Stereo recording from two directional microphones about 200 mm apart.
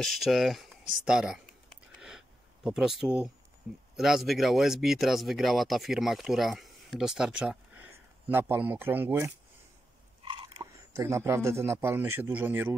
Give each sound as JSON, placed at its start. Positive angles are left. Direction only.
{"t": 0.0, "sound": "speech", "side_deg": 0}
{"t": 2.0, "sound": "a sound", "side_deg": -5}
{"t": 3.9, "sound": "speech", "side_deg": 0}
{"t": 10.2, "sound": "speech", "side_deg": -25}